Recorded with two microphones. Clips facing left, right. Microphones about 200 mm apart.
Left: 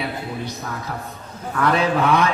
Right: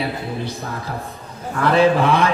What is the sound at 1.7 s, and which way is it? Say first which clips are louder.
Music: right 5 dB; 30° right (ahead or behind).